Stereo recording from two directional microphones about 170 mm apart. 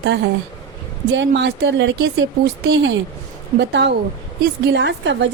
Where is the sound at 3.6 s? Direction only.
90° right.